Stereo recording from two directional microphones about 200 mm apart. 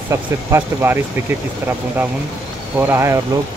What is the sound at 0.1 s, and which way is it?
Speech, 15° right (ahead or behind).